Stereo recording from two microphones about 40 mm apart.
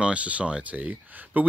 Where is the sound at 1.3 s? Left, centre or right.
Right.